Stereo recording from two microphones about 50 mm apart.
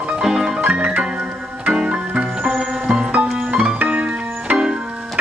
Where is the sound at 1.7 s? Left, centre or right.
Centre.